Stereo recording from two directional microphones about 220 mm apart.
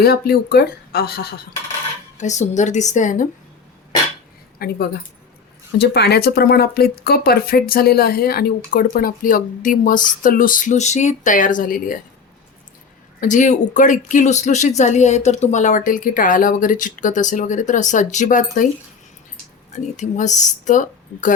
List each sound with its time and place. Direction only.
0.0 s speech: 45° left (ahead or behind)
2.1 s speech: 30° left (ahead or behind)
4.6 s speech: 45° left (ahead or behind)
13.1 s speech: 35° left (ahead or behind)
20.0 s speech: 35° left (ahead or behind)